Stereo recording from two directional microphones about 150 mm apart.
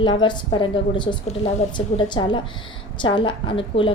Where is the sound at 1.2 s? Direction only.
45° left (ahead or behind).